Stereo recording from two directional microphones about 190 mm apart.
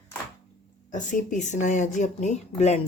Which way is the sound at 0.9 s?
40° left (ahead or behind).